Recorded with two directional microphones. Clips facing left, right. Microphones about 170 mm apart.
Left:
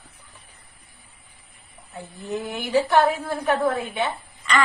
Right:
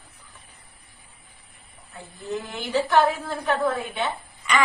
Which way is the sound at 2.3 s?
15° left (ahead or behind).